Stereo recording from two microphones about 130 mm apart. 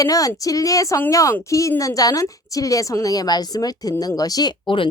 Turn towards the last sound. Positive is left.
turn(degrees=40)  # may be behind; listen again after turning